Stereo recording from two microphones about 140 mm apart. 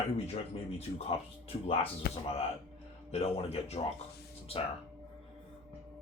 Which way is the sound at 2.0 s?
90° left.